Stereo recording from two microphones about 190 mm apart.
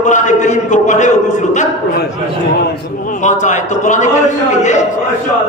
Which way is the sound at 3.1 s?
40° left (ahead or behind).